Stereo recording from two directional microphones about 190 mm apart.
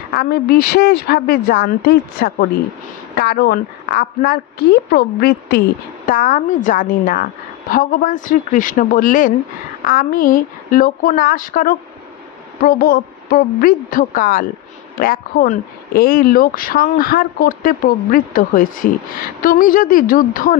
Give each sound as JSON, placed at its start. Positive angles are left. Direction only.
{"t": 0.1, "sound": "a woman's voice", "side_deg": 50}
{"t": 6.0, "sound": "speech", "side_deg": 45}